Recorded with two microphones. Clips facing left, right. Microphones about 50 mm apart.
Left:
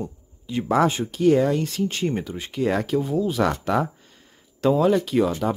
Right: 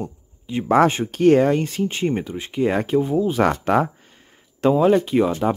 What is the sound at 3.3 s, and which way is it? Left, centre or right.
Speech, right.